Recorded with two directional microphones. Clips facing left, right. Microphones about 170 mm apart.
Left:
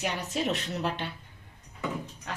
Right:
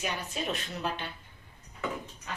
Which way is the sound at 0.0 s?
75° left (ahead or behind).